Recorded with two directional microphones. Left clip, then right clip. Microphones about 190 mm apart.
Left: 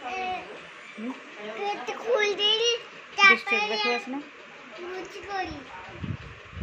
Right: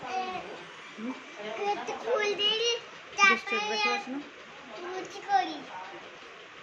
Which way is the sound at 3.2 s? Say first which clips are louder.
Left 5 dB; 30° left (ahead or behind).